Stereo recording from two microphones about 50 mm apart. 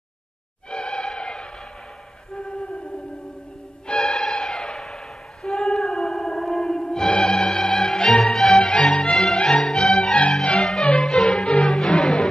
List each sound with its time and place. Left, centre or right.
0.7 s a sound: centre
3.8 s music: centre
6.8 s music: centre